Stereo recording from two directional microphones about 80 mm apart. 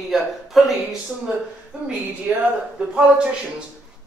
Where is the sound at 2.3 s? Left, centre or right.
Centre.